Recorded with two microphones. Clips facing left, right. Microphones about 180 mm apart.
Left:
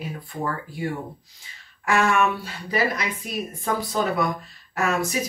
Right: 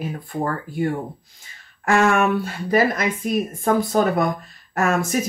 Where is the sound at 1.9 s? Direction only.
50° right (ahead or behind).